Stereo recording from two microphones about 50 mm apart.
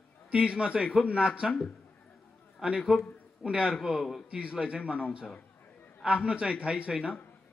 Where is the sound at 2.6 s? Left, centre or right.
Centre.